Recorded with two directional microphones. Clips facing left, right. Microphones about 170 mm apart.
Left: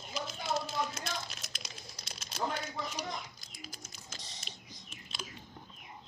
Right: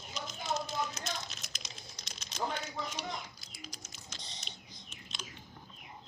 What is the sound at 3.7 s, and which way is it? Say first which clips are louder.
Typing: left 1 dB; 50° left (ahead or behind).